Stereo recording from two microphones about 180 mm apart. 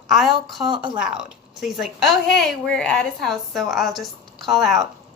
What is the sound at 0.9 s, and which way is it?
A woman's voice, 5° right (ahead or behind).